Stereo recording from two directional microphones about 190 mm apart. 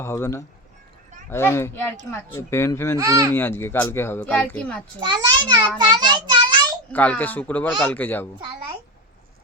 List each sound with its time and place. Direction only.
0.0 s speech: 15° left (ahead or behind)
3.0 s speech: 15° right (ahead or behind)
3.3 s speech: 10° left (ahead or behind)
5.0 s a child's voice: 25° right (ahead or behind)
6.9 s speech: 10° left (ahead or behind)